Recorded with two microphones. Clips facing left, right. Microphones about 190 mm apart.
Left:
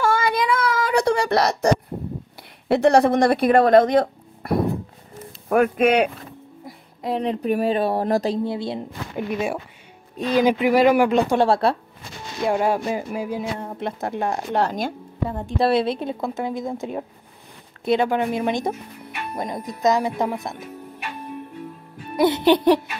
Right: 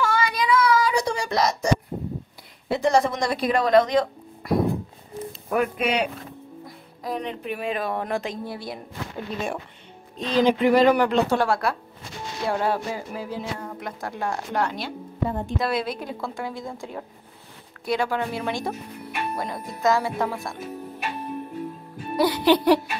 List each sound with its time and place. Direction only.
0.0 s a sound: 50° left (ahead or behind)
2.7 s speech: 65° left (ahead or behind)
7.0 s speech: 30° left (ahead or behind)
8.5 s a woman's voice: 25° left (ahead or behind)
9.3 s speech: 10° left (ahead or behind)
11.3 s a woman's voice: 30° left (ahead or behind)
12.4 s speech: 15° left (ahead or behind)
13.6 s a woman's voice: 25° left (ahead or behind)
14.6 s speech: 45° left (ahead or behind)
15.6 s a woman's voice: 30° left (ahead or behind)
22.1 s a woman's voice: 25° left (ahead or behind)